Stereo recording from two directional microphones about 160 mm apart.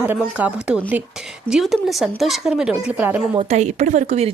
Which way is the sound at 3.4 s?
40° right (ahead or behind).